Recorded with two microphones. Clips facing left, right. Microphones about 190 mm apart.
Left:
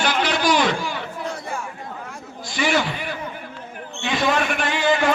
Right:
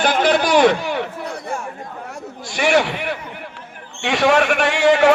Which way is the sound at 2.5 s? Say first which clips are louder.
Right 5 dB; 70° right (ahead or behind).